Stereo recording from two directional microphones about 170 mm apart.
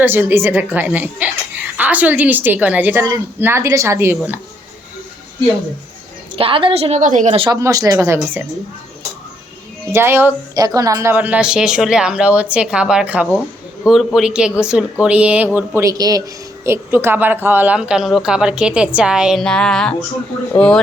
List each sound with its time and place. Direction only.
0.0 s a woman's voice: 10° right (ahead or behind)
6.3 s a woman's voice: 30° right (ahead or behind); by 7.3 s 45° right (ahead or behind)
7.3 s speech: 30° right (ahead or behind)
7.6 s a woman's voice: 20° right (ahead or behind)
9.9 s a woman's voice: 15° right (ahead or behind); by 20.8 s 5° left (ahead or behind)